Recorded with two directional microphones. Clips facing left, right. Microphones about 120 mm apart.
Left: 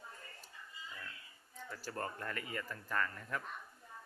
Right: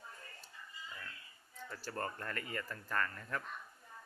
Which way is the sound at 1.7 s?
10° left (ahead or behind).